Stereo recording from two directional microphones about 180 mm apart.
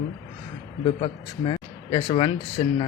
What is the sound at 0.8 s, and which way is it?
Speech, 30° left (ahead or behind).